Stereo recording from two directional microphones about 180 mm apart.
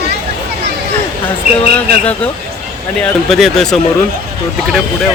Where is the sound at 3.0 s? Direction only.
Centre (ahead or behind).